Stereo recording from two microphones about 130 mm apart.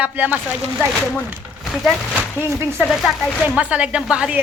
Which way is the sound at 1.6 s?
Centre (ahead or behind).